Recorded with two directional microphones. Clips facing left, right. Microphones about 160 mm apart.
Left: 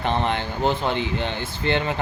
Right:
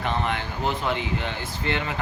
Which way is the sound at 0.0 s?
30° left (ahead or behind).